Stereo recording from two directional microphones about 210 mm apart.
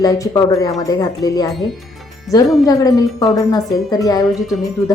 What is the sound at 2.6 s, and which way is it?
A woman's voice, 15° left (ahead or behind).